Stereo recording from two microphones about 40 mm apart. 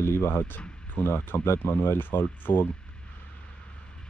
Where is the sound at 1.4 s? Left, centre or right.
Left.